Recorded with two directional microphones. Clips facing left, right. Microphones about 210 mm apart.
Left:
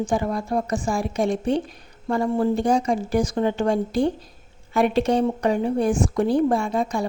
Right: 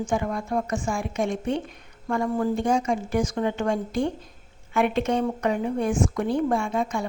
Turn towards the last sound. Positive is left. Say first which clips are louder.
# left 2 dB
turn(degrees=35)  # may be behind; listen again after turning